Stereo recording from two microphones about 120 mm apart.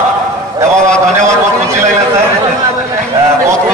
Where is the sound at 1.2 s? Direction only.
25° right (ahead or behind).